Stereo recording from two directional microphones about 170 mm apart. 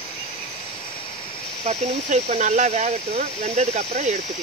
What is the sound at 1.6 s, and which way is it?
Speech, 40° right (ahead or behind).